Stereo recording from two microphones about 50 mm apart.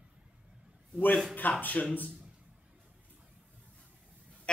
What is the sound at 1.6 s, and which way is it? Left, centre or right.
Speech, left.